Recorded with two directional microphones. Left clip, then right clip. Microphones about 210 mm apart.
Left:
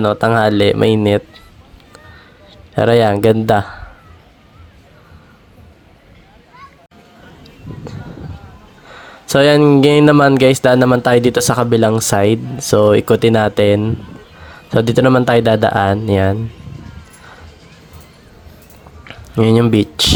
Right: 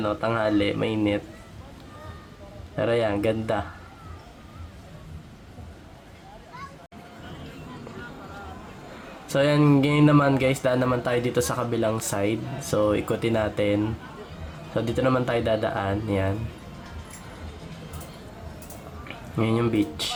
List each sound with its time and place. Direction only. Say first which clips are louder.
0.0 s speech: left 12 dB; 50° left (ahead or behind)
2.7 s speech: left 12 dB; 50° left (ahead or behind)
9.2 s speech: left 12 dB; 45° left (ahead or behind)
19.0 s speech: left 13 dB; 50° left (ahead or behind)